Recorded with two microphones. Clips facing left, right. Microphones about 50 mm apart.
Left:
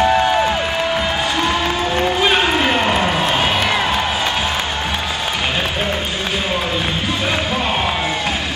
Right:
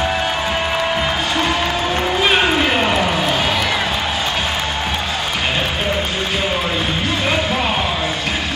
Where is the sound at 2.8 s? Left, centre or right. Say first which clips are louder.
Even; centre.